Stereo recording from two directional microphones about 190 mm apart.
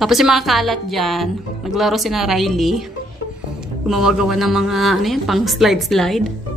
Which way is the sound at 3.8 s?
Centre (ahead or behind).